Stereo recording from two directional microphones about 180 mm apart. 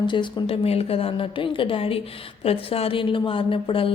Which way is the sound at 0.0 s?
25° left (ahead or behind).